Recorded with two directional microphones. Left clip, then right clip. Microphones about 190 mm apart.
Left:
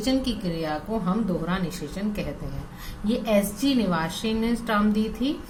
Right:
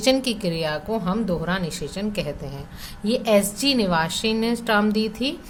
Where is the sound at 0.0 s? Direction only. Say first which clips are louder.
Right 6 dB; 45° right (ahead or behind).